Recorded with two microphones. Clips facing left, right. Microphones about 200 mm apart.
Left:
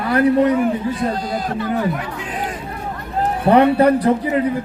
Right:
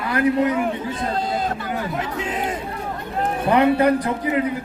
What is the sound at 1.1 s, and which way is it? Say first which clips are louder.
Speech: left 1 dB; 25° right (ahead or behind).